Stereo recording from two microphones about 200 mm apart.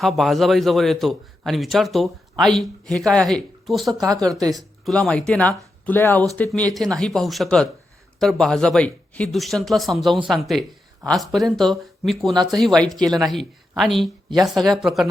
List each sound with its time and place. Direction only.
0.0 s a man's voice: centre (ahead or behind)
4.4 s speech: 20° right (ahead or behind)
4.9 s a man's voice: 5° left (ahead or behind)
12.3 s speech: 20° right (ahead or behind)
12.5 s a man's voice: centre (ahead or behind)